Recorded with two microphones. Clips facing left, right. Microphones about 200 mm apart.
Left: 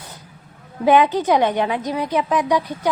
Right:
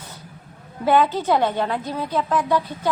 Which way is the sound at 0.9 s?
15° left (ahead or behind).